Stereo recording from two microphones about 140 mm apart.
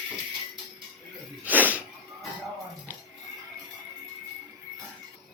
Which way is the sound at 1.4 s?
10° right (ahead or behind).